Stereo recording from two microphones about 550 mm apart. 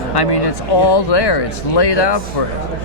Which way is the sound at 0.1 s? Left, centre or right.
Left.